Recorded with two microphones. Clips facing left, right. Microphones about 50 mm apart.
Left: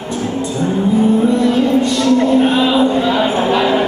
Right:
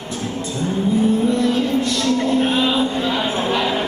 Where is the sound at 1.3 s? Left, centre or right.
Centre.